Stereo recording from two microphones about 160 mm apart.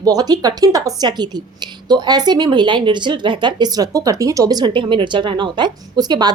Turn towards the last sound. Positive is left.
turn(degrees=-25)  # may be behind; listen again after turning